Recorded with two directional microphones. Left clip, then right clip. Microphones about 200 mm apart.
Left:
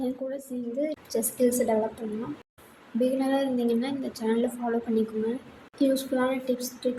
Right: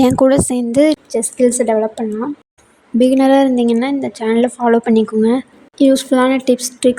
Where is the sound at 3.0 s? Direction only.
55° right (ahead or behind).